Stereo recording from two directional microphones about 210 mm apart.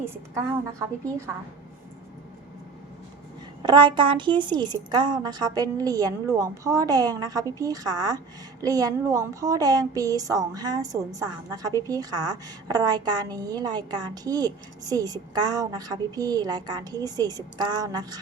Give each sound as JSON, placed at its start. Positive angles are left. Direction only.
{"t": 0.0, "sound": "a woman's voice", "side_deg": -15}
{"t": 3.6, "sound": "a woman's voice", "side_deg": -20}